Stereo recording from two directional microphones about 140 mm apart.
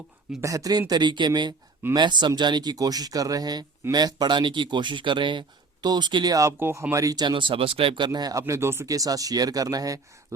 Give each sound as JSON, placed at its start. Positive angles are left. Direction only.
{"t": 0.4, "sound": "speech", "side_deg": -25}